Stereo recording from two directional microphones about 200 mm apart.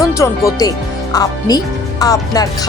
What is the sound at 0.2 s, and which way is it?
Speech, 15° left (ahead or behind).